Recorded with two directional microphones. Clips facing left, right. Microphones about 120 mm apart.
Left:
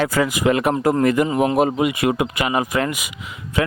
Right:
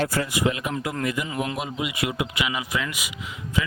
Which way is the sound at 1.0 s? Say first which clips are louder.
Left 9 dB; 55° left (ahead or behind).